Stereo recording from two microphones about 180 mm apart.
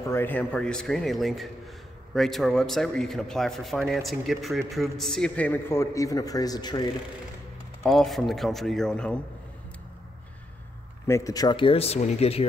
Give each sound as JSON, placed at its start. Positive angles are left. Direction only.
{"t": 0.1, "sound": "a man's voice", "side_deg": 10}
{"t": 7.8, "sound": "a man's voice", "side_deg": 0}
{"t": 11.1, "sound": "speech", "side_deg": 15}